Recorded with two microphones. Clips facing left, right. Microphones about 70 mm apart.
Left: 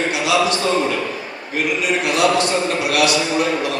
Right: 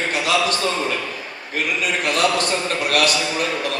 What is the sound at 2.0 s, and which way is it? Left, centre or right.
A man's voice, right.